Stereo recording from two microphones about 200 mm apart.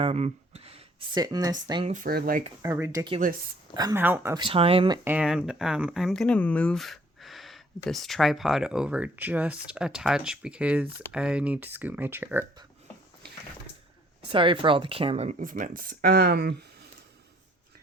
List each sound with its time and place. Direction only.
0.0 s speech: 30° right (ahead or behind)
1.9 s speech: 45° right (ahead or behind)
2.6 s speech: 15° right (ahead or behind)
3.2 s speech: 45° right (ahead or behind)
3.8 s speech: 15° right (ahead or behind)
4.4 s speech: 30° right (ahead or behind)
5.0 s speech: 5° right (ahead or behind)
14.3 s speech: 25° right (ahead or behind); by 16.6 s 55° right (ahead or behind)